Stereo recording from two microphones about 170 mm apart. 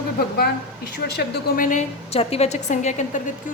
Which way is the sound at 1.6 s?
40° left (ahead or behind).